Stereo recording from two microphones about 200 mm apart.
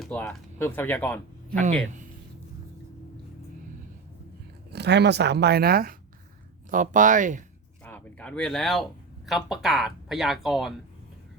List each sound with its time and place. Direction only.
0.0 s speech: 5° left (ahead or behind)
1.6 s speech: 35° right (ahead or behind)
4.7 s speech: 55° right (ahead or behind); by 7.4 s 40° right (ahead or behind)
7.9 s speech: 5° left (ahead or behind)